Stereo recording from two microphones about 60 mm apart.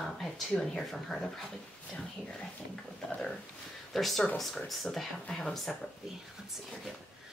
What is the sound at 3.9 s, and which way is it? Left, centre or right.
Speech, centre.